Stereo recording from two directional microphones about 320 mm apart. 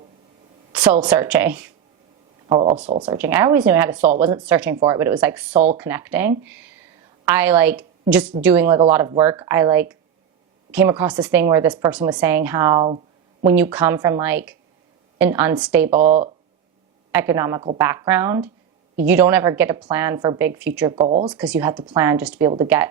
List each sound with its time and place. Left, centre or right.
0.7 s a woman's voice: centre
15.9 s speech: right
17.1 s a woman's voice: centre